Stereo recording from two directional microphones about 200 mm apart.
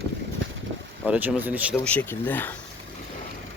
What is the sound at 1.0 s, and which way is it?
Speech, 5° right (ahead or behind).